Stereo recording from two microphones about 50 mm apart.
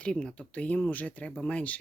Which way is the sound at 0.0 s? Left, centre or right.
Centre.